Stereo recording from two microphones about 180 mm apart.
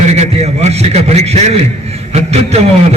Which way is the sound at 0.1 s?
35° right (ahead or behind).